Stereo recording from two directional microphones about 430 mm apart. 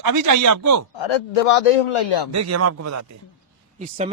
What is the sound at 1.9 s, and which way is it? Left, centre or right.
Speech, left.